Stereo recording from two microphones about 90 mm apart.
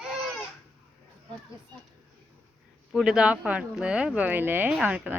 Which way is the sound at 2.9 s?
5° right (ahead or behind).